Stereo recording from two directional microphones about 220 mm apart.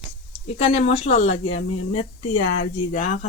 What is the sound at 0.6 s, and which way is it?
Speech, 30° left (ahead or behind).